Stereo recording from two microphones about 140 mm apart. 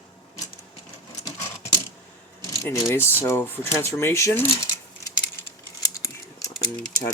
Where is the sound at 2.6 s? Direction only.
20° left (ahead or behind).